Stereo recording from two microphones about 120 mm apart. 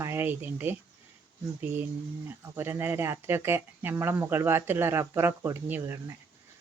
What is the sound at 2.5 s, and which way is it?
Speech, 20° right (ahead or behind).